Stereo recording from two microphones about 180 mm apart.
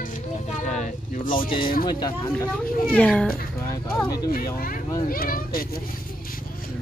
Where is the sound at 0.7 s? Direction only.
40° left (ahead or behind).